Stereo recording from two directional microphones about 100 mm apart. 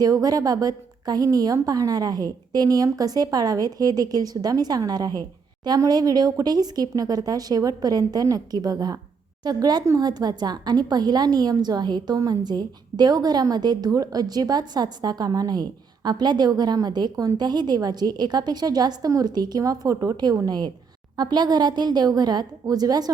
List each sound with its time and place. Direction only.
0.0 s a woman's voice: 40° right (ahead or behind)